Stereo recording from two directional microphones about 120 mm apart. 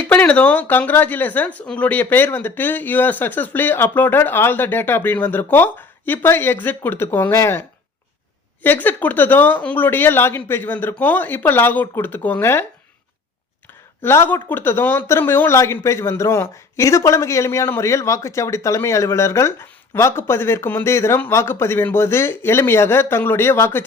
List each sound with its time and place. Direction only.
0.1 s speech: 10° left (ahead or behind)
8.6 s speech: 15° left (ahead or behind)
14.0 s speech: 20° left (ahead or behind)